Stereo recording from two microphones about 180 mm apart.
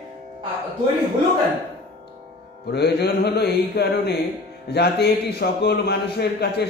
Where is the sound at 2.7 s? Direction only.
65° left (ahead or behind).